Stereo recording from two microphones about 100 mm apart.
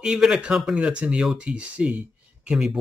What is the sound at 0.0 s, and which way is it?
Speech, 5° right (ahead or behind).